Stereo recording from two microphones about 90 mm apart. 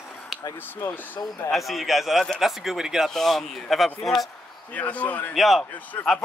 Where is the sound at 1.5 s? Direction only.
Centre (ahead or behind).